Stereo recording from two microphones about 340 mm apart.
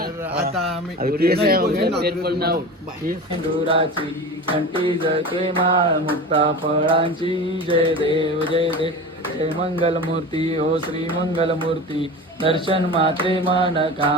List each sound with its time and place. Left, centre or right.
1.0 s speech: right
4.5 s mantra: centre